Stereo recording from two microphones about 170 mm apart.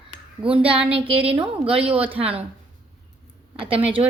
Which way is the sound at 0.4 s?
5° right (ahead or behind).